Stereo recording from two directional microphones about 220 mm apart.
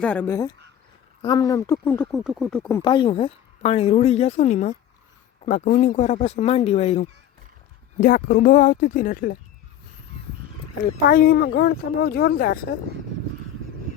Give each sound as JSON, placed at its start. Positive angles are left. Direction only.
{"t": 0.0, "sound": "speech", "side_deg": 5}
{"t": 7.9, "sound": "speech", "side_deg": 45}
{"t": 10.8, "sound": "speech", "side_deg": 45}